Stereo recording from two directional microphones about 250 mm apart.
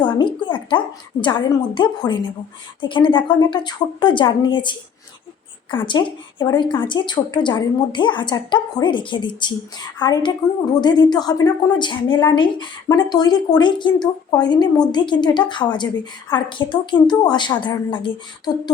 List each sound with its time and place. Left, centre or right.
0.0 s a woman's voice: centre